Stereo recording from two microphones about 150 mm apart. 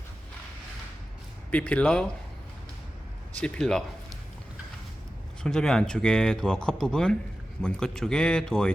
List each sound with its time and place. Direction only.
1.5 s speech: 10° left (ahead or behind)
3.4 s speech: 5° left (ahead or behind)
5.4 s speech: 5° left (ahead or behind)